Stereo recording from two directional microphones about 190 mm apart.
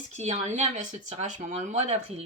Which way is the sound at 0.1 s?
35° right (ahead or behind).